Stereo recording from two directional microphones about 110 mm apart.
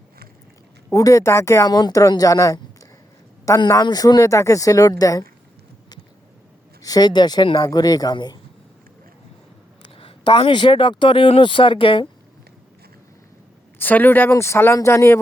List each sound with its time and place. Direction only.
0.9 s speech: 30° left (ahead or behind)
3.7 s speech: 35° left (ahead or behind)
6.8 s speech: 35° left (ahead or behind)
9.8 s speech: 45° left (ahead or behind)
13.7 s speech: 15° left (ahead or behind)